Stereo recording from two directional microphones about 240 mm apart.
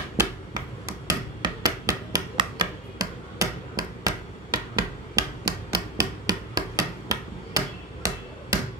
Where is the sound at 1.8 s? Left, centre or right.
Centre.